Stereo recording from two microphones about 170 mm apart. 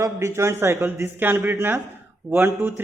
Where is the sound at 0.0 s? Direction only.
15° right (ahead or behind).